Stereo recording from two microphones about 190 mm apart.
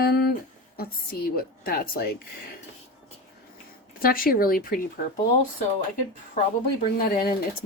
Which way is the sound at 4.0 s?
50° left (ahead or behind).